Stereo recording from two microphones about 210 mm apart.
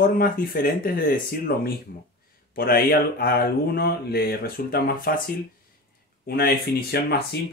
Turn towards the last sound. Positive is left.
turn(degrees=50)  # may be behind; listen again after turning